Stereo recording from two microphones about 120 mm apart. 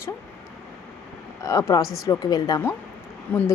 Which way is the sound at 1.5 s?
25° left (ahead or behind).